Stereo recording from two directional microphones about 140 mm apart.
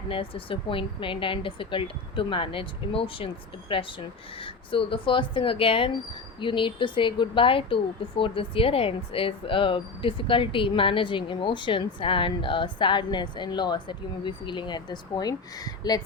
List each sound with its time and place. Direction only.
0.1 s speech: 40° left (ahead or behind)